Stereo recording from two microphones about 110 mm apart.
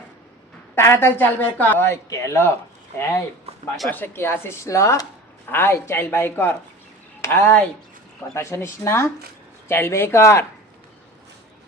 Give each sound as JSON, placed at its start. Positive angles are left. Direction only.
{"t": 0.8, "sound": "speech", "side_deg": 20}
{"t": 3.8, "sound": "speech", "side_deg": 20}